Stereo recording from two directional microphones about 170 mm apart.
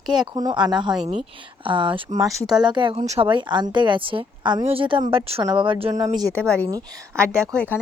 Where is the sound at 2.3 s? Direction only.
Centre (ahead or behind).